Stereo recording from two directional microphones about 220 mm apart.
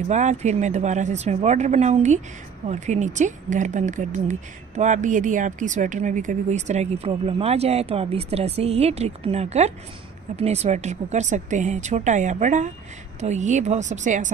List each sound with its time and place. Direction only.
0.1 s speech: 30° right (ahead or behind)